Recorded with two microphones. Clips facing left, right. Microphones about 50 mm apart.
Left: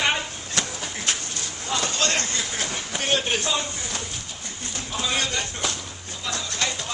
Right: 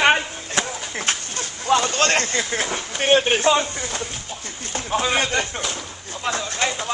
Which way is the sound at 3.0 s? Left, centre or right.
Right.